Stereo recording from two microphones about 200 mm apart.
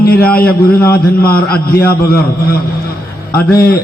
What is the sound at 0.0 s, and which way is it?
A man's voice, 50° left (ahead or behind).